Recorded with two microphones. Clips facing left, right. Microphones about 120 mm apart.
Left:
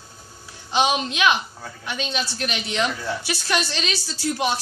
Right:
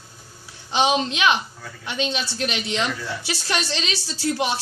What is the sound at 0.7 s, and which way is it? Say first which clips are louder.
A woman's voice: right 1 dB; 25° right (ahead or behind).